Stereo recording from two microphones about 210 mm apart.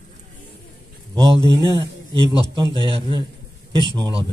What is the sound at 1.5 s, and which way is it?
Speech, 20° right (ahead or behind).